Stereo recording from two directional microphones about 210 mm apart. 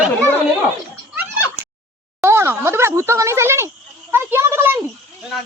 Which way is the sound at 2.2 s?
10° right (ahead or behind).